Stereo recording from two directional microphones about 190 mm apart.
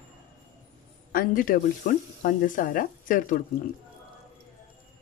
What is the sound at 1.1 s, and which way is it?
Speech, 50° left (ahead or behind).